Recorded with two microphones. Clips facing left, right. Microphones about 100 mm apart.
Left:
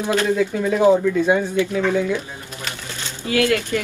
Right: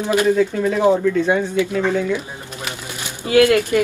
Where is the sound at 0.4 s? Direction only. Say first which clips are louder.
Right 1 dB; centre (ahead or behind).